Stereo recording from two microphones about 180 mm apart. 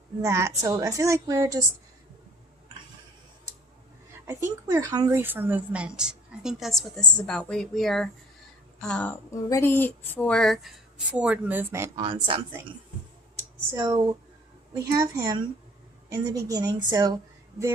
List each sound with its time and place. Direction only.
0.2 s a woman's voice: 15° right (ahead or behind)
4.3 s a woman's voice: 15° right (ahead or behind)
12.0 s a woman's voice: 30° right (ahead or behind)
13.7 s a woman's voice: 25° right (ahead or behind)